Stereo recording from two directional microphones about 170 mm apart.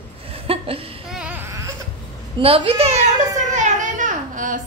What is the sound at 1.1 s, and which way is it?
Baby cry, 10° right (ahead or behind).